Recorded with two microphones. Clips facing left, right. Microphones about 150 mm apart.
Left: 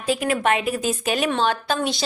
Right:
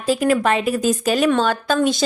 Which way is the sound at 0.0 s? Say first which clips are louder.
Right 4 dB; 40° right (ahead or behind).